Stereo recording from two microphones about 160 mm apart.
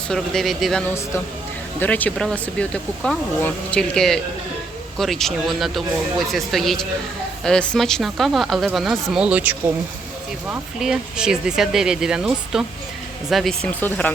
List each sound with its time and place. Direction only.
0.1 s speech: centre (ahead or behind)